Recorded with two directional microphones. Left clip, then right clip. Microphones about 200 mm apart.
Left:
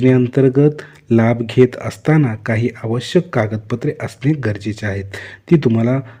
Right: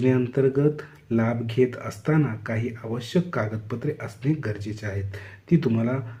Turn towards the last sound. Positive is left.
turn(degrees=40)  # may be behind; listen again after turning